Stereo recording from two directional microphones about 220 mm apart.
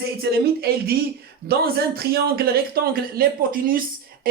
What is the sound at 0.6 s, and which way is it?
A man's voice, 45° right (ahead or behind).